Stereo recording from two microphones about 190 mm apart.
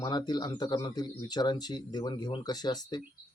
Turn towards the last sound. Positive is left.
turn(degrees=20)  # may be behind; listen again after turning